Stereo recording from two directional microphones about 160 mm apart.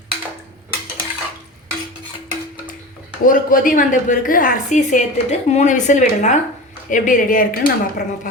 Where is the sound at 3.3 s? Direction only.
60° left (ahead or behind).